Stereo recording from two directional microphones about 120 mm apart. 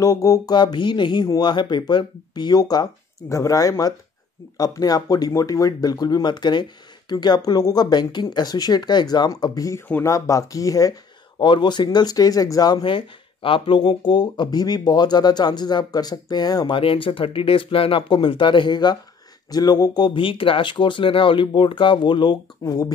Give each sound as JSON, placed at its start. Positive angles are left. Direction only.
{"t": 0.0, "sound": "speech", "side_deg": 30}
{"t": 11.4, "sound": "speech", "side_deg": 40}